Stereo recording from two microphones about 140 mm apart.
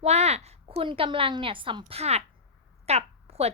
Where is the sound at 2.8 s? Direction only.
50° right (ahead or behind).